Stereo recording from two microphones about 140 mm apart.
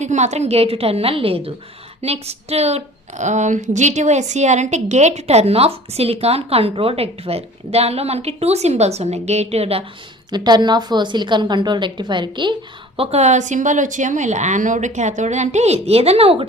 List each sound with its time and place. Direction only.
0.0 s speech: 55° right (ahead or behind)
10.3 s a woman's voice: 30° right (ahead or behind)
13.0 s speech: 50° right (ahead or behind)